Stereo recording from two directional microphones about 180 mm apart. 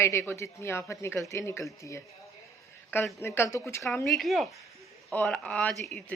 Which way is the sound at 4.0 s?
Centre (ahead or behind).